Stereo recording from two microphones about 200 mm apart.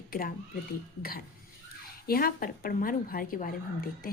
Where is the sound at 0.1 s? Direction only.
45° left (ahead or behind).